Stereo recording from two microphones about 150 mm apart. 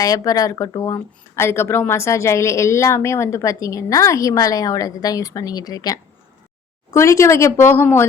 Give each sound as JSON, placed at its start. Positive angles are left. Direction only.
{"t": 0.0, "sound": "speech", "side_deg": 25}